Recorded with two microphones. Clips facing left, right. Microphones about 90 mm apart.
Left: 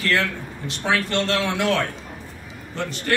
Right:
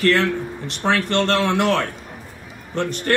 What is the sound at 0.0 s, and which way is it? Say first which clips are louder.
A man's voice: right 5 dB; 60° right (ahead or behind).